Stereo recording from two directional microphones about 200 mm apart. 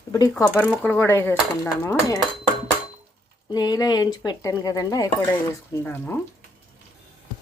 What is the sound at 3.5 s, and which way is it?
A woman's voice, 20° left (ahead or behind).